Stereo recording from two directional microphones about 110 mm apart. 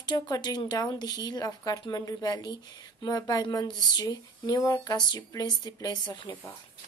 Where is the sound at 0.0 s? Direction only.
40° left (ahead or behind).